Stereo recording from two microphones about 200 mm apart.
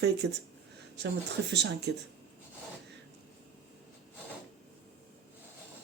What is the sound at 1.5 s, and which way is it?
Speech, 55° right (ahead or behind).